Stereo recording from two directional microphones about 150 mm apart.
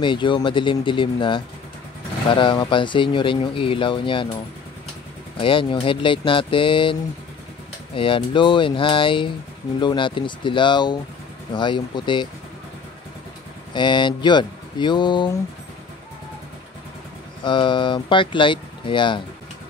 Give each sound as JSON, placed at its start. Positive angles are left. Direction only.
{"t": 0.0, "sound": "speech", "side_deg": 35}
{"t": 5.4, "sound": "speech", "side_deg": 35}
{"t": 13.7, "sound": "speech", "side_deg": 30}
{"t": 17.4, "sound": "speech", "side_deg": 30}